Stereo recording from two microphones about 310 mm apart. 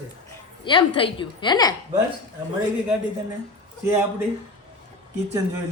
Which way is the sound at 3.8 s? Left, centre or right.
Centre.